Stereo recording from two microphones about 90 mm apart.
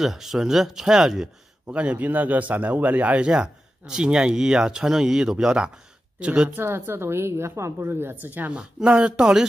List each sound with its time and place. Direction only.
0.0 s speech: 5° right (ahead or behind)
6.5 s a woman's voice: 25° right (ahead or behind); by 9.5 s 10° right (ahead or behind)